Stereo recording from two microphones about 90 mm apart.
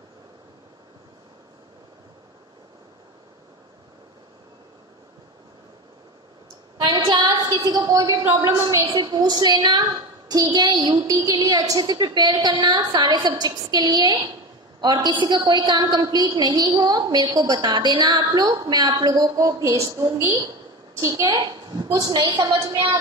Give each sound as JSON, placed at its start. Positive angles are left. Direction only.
{"t": 6.8, "sound": "a sound", "side_deg": -60}
{"t": 8.5, "sound": "a woman's voice", "side_deg": -40}
{"t": 21.0, "sound": "a woman's voice", "side_deg": -35}
{"t": 21.3, "sound": "a woman's voice", "side_deg": -55}